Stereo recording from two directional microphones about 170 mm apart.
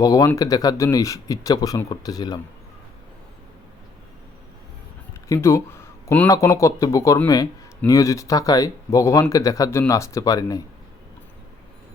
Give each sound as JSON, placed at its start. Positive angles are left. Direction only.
{"t": 0.0, "sound": "speech", "side_deg": 20}
{"t": 5.3, "sound": "speech", "side_deg": 15}